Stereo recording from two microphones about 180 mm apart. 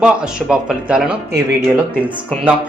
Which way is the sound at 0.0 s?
5° right (ahead or behind).